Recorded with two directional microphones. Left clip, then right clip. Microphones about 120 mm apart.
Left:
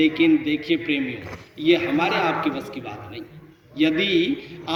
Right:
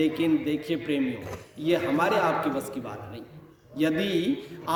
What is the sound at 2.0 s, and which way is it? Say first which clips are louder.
Speech: left 2 dB; 50° right (ahead or behind).